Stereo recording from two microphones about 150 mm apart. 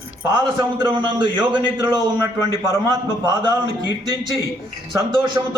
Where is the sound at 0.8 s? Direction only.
30° right (ahead or behind).